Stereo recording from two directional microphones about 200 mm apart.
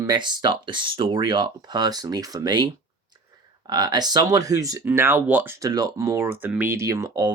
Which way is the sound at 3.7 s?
20° right (ahead or behind).